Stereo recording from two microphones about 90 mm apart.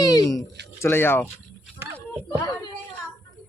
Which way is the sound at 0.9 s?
25° left (ahead or behind).